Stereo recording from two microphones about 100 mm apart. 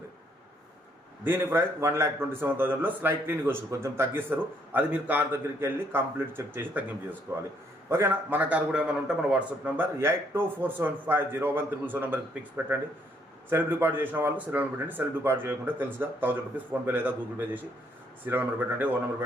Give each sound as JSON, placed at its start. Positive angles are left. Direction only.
{"t": 1.2, "sound": "a man's voice", "side_deg": -20}
{"t": 9.7, "sound": "a man's voice", "side_deg": -20}